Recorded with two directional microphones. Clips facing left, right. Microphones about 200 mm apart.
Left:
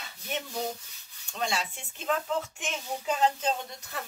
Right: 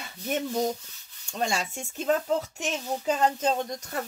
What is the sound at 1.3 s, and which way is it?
Speech, 45° right (ahead or behind).